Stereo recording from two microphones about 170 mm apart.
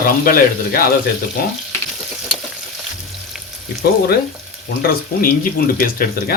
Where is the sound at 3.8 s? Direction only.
65° left (ahead or behind).